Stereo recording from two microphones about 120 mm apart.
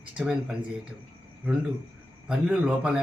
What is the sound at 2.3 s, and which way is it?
Speech, 5° right (ahead or behind).